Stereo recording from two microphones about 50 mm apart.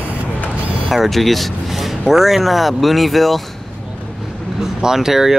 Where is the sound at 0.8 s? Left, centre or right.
Centre.